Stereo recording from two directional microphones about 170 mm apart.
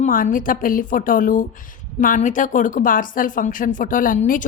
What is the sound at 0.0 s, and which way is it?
A woman's voice, 55° left (ahead or behind).